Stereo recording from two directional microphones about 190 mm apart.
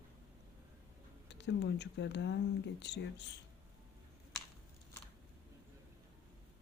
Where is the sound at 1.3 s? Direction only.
65° left (ahead or behind).